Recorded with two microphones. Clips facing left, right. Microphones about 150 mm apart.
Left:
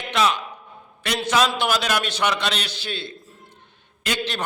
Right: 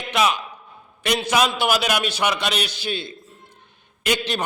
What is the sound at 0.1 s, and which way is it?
A man's voice, 10° right (ahead or behind).